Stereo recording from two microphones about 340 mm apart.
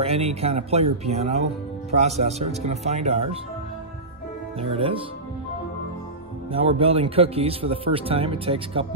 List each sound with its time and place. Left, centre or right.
0.0 s speech: centre
4.6 s speech: centre
6.5 s speech: centre